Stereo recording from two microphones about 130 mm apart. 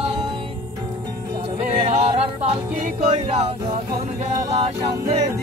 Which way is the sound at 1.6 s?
55° right (ahead or behind).